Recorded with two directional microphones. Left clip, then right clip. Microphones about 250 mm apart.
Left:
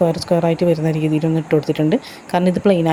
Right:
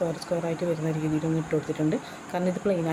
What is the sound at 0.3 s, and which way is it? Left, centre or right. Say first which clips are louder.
Speech: left 12 dB; left.